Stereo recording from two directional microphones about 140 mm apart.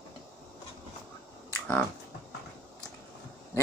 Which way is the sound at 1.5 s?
10° left (ahead or behind).